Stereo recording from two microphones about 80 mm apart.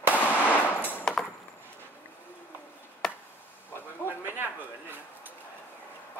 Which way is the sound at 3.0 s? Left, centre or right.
Centre.